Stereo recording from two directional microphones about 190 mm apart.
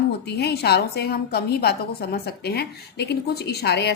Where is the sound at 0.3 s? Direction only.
60° left (ahead or behind).